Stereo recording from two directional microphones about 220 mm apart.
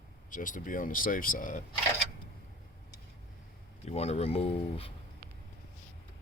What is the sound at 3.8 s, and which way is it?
Speech, 30° left (ahead or behind).